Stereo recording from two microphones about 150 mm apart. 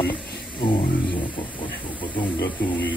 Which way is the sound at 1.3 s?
35° left (ahead or behind).